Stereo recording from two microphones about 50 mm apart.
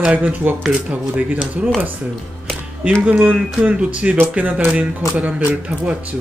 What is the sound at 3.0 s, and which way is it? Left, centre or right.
Speech, right.